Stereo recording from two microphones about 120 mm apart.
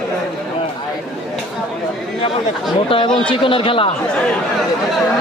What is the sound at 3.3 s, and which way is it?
Speech, 45° left (ahead or behind).